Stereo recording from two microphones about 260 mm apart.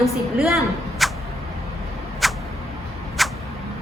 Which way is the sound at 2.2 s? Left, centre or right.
Centre.